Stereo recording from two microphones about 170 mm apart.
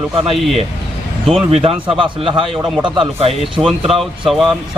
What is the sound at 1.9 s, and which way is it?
Speech, 30° right (ahead or behind).